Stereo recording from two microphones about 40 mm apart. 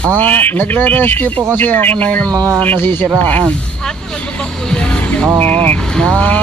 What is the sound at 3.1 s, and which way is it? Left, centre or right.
Speech, left.